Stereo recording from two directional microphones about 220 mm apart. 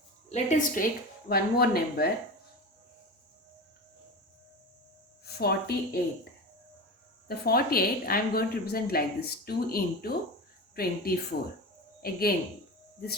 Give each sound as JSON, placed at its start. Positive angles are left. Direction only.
{"t": 0.3, "sound": "a woman's voice", "side_deg": 35}
{"t": 1.3, "sound": "a woman's voice", "side_deg": 45}
{"t": 5.2, "sound": "a woman's voice", "side_deg": 45}
{"t": 7.3, "sound": "a woman's voice", "side_deg": 45}